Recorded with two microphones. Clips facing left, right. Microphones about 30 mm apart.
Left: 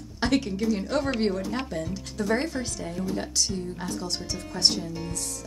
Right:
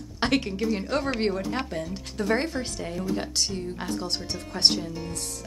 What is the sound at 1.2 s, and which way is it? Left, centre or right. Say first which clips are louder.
Speech: even; centre.